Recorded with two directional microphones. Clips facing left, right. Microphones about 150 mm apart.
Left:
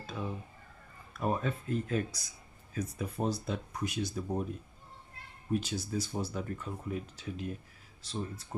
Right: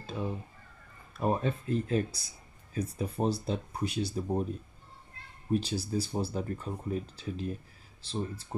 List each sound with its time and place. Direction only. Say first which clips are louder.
1.1 s speech: right 3 dB; 30° right (ahead or behind)
5.5 s speech: right 3 dB; 30° right (ahead or behind)